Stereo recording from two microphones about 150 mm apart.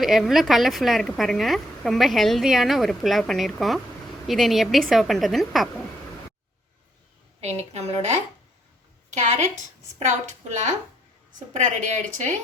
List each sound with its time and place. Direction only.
0.0 s a woman's voice: centre (ahead or behind)
7.7 s a woman's voice: 45° right (ahead or behind)
9.0 s a sound: 55° right (ahead or behind)
10.0 s a woman's voice: 55° right (ahead or behind)